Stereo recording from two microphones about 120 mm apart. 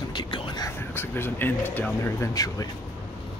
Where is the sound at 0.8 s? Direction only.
20° left (ahead or behind).